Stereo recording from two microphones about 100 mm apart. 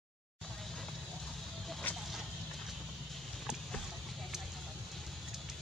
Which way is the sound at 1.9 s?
15° left (ahead or behind).